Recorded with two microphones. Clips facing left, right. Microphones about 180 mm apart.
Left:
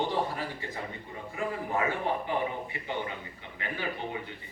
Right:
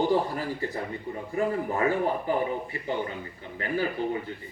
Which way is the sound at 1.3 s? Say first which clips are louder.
Right 5 dB; 40° right (ahead or behind).